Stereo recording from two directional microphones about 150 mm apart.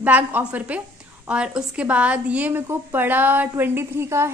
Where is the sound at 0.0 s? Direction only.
10° right (ahead or behind).